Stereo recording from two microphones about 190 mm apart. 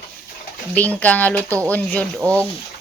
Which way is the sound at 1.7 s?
10° left (ahead or behind).